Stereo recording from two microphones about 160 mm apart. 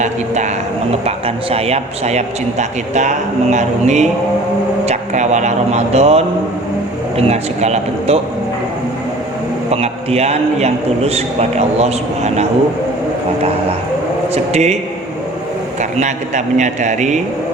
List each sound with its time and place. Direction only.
0.0 s a man's voice: 45° right (ahead or behind)
9.6 s a man's voice: 40° right (ahead or behind)
14.3 s a man's voice: 45° right (ahead or behind)
15.8 s a man's voice: 45° right (ahead or behind)